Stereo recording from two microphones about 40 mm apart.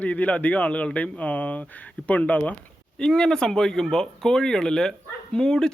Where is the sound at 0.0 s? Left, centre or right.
Left.